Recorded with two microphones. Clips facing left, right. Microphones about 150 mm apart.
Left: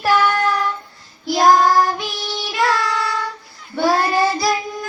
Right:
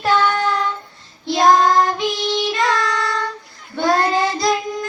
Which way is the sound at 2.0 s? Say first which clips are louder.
Right 7 dB; 20° right (ahead or behind).